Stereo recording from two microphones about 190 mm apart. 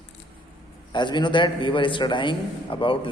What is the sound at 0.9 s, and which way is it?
A man's voice, 25° left (ahead or behind).